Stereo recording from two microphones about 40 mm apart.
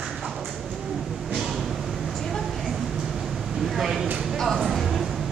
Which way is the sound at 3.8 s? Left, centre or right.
Centre.